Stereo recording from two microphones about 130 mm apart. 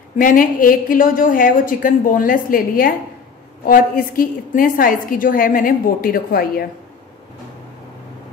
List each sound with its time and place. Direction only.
0.2 s a woman's voice: 90° left